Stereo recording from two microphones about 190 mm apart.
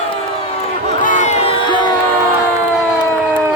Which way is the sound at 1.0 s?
40° left (ahead or behind).